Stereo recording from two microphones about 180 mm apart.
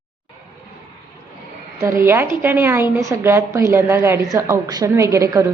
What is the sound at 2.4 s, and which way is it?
A woman's voice, 10° right (ahead or behind).